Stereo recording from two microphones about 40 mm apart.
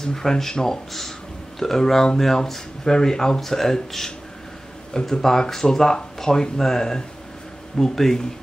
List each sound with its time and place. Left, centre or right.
0.0 s speech: centre
4.9 s speech: centre